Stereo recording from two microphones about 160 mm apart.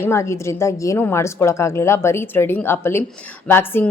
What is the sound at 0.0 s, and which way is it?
A woman's voice, 15° left (ahead or behind).